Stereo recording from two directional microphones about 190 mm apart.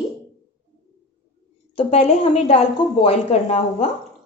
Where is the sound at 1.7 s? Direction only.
30° left (ahead or behind).